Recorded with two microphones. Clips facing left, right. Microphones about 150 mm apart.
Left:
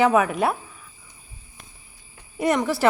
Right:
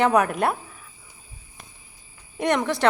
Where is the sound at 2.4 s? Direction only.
5° left (ahead or behind).